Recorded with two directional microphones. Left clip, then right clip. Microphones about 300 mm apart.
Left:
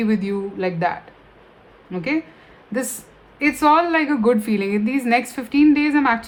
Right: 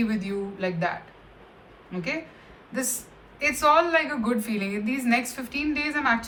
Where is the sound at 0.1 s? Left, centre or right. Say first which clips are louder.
Left 7 dB; left.